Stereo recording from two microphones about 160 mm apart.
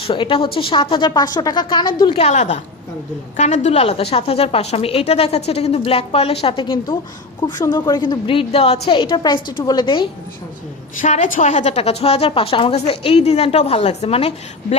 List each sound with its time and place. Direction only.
0.0 s a woman's voice: 35° left (ahead or behind)
10.9 s a woman's voice: 50° left (ahead or behind)